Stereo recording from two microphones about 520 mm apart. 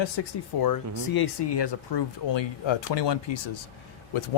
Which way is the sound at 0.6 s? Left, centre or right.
Left.